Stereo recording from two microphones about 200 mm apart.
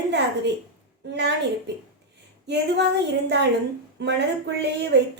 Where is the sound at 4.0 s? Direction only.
60° right (ahead or behind).